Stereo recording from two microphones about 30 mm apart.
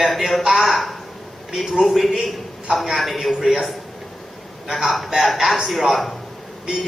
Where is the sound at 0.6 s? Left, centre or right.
Centre.